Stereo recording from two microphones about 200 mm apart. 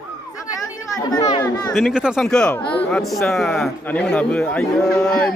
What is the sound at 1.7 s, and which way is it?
Speech, centre (ahead or behind).